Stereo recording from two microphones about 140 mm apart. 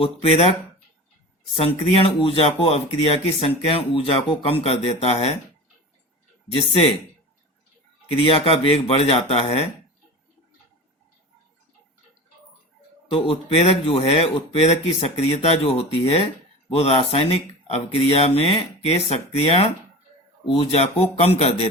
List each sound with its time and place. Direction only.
0.0 s speech: 45° left (ahead or behind)
1.5 s speech: 45° left (ahead or behind)
8.2 s speech: 40° left (ahead or behind)
13.1 s speech: 40° left (ahead or behind)